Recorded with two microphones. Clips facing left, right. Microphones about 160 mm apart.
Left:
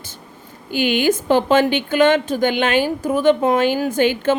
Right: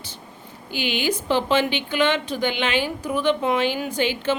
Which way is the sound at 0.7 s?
50° left (ahead or behind).